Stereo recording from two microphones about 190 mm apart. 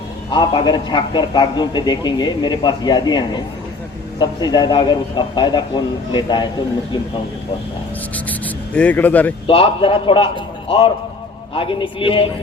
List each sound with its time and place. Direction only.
0.3 s a man's voice: 25° left (ahead or behind)
8.1 s speech: 10° left (ahead or behind)
9.5 s a man's voice: 30° left (ahead or behind)